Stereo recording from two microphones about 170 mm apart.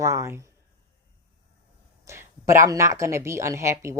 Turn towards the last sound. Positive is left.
turn(degrees=-15)  # may be behind; listen again after turning